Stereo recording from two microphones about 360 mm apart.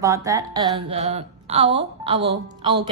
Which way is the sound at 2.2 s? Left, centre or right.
Right.